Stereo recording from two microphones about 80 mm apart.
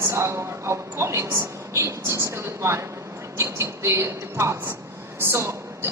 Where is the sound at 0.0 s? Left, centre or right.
Right.